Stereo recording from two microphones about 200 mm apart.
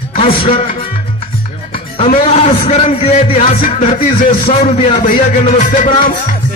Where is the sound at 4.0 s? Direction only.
45° left (ahead or behind).